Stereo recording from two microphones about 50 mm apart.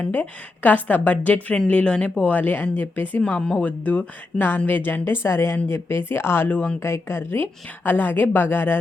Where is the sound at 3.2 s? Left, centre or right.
Left.